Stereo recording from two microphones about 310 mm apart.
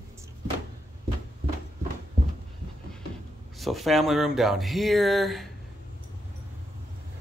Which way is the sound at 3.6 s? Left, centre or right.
Centre.